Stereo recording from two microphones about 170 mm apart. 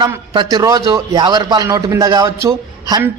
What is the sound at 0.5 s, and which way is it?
A man's voice, 25° right (ahead or behind).